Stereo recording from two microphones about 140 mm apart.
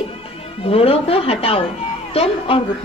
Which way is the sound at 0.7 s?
45° left (ahead or behind).